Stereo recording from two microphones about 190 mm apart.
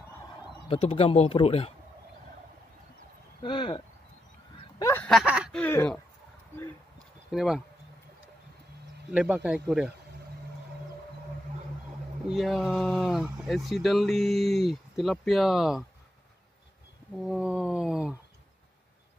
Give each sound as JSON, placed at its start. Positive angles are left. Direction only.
{"t": 0.7, "sound": "speech", "side_deg": 30}
{"t": 3.4, "sound": "speech", "side_deg": 25}
{"t": 4.7, "sound": "a sound", "side_deg": 15}
{"t": 5.1, "sound": "speech", "side_deg": -5}
{"t": 5.6, "sound": "speech", "side_deg": 10}
{"t": 7.2, "sound": "speech", "side_deg": 0}
{"t": 9.1, "sound": "speech", "side_deg": -5}
{"t": 12.3, "sound": "speech", "side_deg": 0}
{"t": 17.2, "sound": "speech", "side_deg": -5}